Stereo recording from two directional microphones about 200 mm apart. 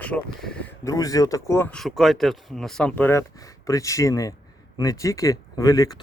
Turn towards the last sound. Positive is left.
turn(degrees=20)  # may be behind; listen again after turning